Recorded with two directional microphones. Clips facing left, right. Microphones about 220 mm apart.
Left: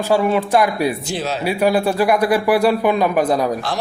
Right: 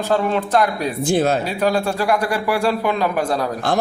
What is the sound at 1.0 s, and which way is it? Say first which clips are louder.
Speech: right 6 dB; 50° right (ahead or behind).